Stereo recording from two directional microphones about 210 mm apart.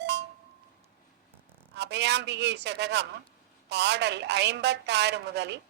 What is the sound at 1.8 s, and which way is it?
A woman's voice, 55° right (ahead or behind).